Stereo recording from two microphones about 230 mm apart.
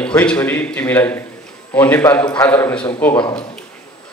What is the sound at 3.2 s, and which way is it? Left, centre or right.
Speech, left.